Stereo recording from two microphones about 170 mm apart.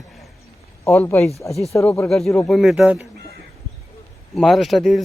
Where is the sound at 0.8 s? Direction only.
15° left (ahead or behind); by 3.0 s centre (ahead or behind).